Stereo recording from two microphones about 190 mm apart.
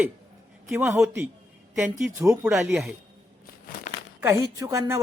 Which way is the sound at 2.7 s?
Centre (ahead or behind).